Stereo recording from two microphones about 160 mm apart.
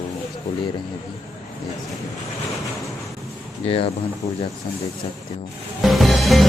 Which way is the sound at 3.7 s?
35° left (ahead or behind).